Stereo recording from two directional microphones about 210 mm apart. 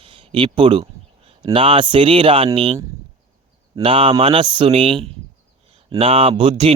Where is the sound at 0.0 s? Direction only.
25° right (ahead or behind).